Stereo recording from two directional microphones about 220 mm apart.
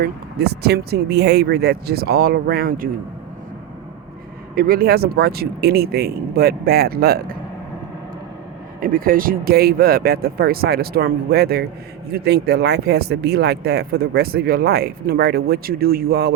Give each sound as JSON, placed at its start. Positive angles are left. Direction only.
{"t": 0.0, "sound": "speech", "side_deg": -45}
{"t": 4.5, "sound": "speech", "side_deg": -40}
{"t": 8.8, "sound": "speech", "side_deg": -40}